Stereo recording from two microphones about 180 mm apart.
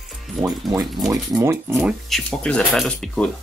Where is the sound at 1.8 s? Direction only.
Centre (ahead or behind).